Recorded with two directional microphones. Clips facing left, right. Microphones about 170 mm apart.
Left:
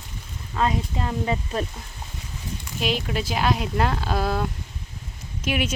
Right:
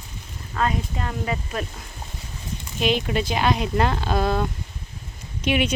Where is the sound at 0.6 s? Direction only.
20° left (ahead or behind).